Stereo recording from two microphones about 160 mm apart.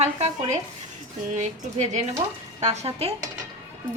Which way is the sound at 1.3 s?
50° right (ahead or behind).